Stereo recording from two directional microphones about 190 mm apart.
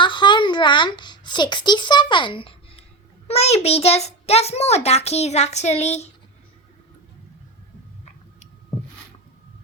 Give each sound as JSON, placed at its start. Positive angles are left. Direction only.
{"t": 0.0, "sound": "a child's voice", "side_deg": 25}